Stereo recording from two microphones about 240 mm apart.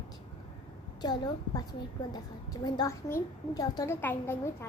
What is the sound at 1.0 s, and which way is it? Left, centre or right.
A woman's voice, centre.